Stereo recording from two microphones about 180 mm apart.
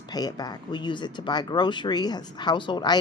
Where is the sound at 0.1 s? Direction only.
20° left (ahead or behind).